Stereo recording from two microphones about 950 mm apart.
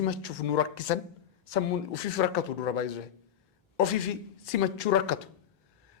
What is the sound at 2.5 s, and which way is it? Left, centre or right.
Speech, left.